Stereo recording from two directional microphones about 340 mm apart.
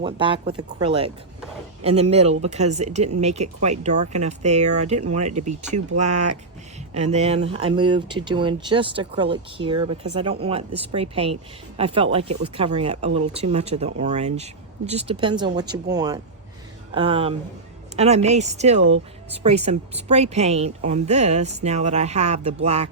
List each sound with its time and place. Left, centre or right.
0.0 s speech: centre